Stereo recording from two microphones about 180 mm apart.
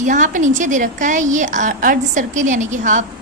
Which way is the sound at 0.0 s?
45° right (ahead or behind).